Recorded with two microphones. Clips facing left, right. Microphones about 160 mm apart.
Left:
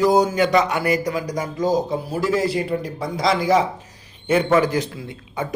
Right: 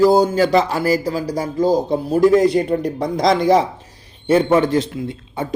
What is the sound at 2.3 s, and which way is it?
Speech, centre (ahead or behind).